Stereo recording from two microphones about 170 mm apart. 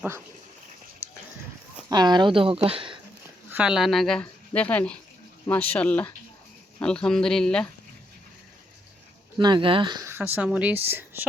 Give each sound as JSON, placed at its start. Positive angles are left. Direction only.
{"t": 1.9, "sound": "speech", "side_deg": -25}
{"t": 3.5, "sound": "a woman's voice", "side_deg": -5}
{"t": 9.4, "sound": "speech", "side_deg": -30}
{"t": 10.1, "sound": "a woman's voice", "side_deg": -10}